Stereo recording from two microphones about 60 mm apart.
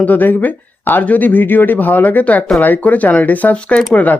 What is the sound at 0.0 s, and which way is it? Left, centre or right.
Speech, left.